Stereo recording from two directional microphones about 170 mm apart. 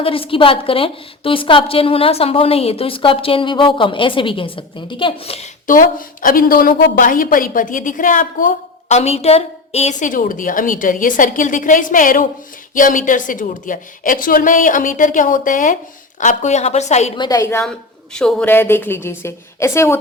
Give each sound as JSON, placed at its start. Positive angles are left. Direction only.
{"t": 0.0, "sound": "a woman's voice", "side_deg": 35}
{"t": 5.6, "sound": "a woman's voice", "side_deg": 55}
{"t": 17.2, "sound": "a woman's voice", "side_deg": 20}
{"t": 17.6, "sound": "a woman's voice", "side_deg": 5}